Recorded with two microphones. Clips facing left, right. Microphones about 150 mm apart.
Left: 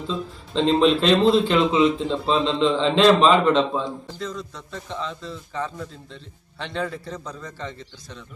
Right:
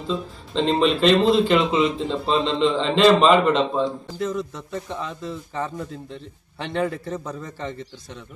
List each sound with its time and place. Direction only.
0.1 s speech: centre (ahead or behind)
4.4 s a man's voice: 15° right (ahead or behind)